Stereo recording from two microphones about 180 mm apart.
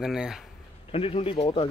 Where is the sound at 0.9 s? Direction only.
30° left (ahead or behind).